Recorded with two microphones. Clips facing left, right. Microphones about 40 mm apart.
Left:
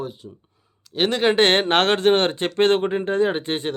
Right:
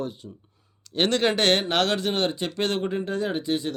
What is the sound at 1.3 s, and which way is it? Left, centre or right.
Speech, left.